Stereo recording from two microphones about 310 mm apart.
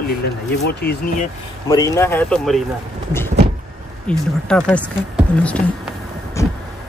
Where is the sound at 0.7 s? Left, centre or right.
Left.